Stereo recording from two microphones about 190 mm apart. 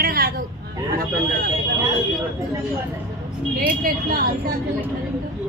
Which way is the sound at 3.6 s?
50° right (ahead or behind).